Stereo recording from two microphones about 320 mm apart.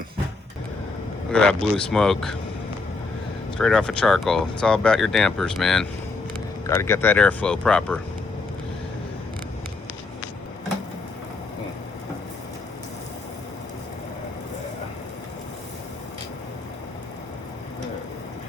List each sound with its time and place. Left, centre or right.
1.3 s speech: centre
3.6 s speech: centre